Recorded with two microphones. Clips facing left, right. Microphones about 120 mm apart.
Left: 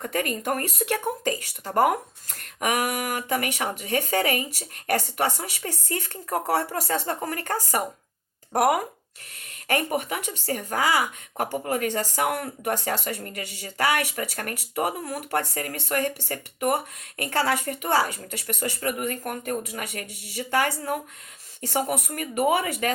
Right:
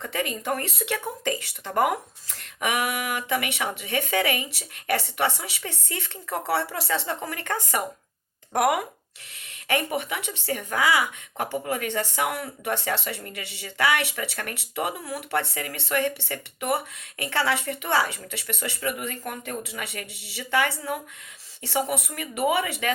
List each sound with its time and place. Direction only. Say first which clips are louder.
0.0 s speech: left 2 dB; 45° left (ahead or behind)